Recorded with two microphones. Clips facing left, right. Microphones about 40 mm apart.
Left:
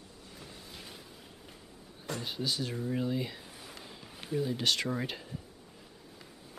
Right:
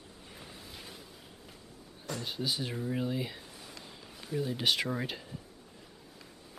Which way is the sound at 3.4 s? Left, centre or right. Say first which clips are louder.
Left 1 dB; centre.